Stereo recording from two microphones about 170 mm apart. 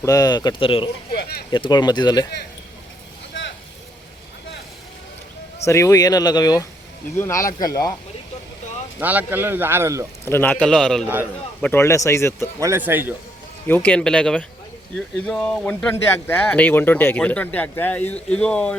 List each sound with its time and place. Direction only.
0.0 s speech: 20° left (ahead or behind)
1.1 s a sound: 65° left (ahead or behind)
1.5 s speech: 25° left (ahead or behind)
5.6 s speech: 15° left (ahead or behind)
9.0 s speech: 10° right (ahead or behind)
10.2 s a man's voice: 10° left (ahead or behind)
11.6 s speech: 15° left (ahead or behind)
12.5 s speech: 15° right (ahead or behind)
13.7 s speech: 10° left (ahead or behind)